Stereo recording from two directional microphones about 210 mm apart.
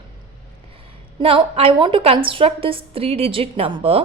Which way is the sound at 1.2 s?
25° right (ahead or behind).